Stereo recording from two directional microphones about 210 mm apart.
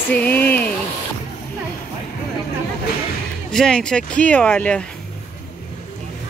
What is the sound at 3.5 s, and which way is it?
Speech, 5° left (ahead or behind).